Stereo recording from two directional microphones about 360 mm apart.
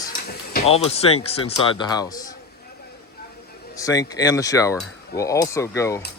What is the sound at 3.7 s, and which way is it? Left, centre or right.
Speech, centre.